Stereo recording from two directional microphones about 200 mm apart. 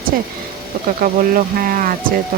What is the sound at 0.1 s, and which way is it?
Speech, 45° right (ahead or behind).